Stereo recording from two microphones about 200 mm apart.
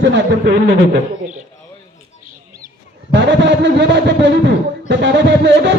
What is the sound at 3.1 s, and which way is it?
A man's voice, 65° right (ahead or behind).